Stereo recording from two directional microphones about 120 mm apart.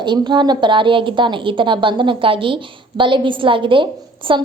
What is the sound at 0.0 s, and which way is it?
A woman's voice, 40° right (ahead or behind).